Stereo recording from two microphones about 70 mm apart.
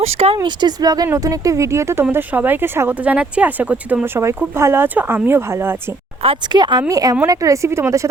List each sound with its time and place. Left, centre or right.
0.4 s speech: right
1.0 s speech: right
2.1 s speech: right
3.0 s speech: centre
4.0 s speech: right
6.5 s speech: right
6.8 s speech: right